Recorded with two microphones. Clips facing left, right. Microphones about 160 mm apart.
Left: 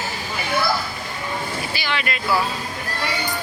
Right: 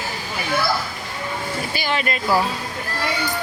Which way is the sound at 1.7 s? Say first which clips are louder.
Right 4 dB; 45° right (ahead or behind).